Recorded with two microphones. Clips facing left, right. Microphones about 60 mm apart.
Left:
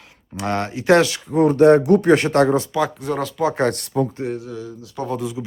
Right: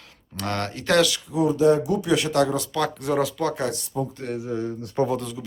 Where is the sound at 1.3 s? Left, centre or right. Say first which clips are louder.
Left 9 dB; left.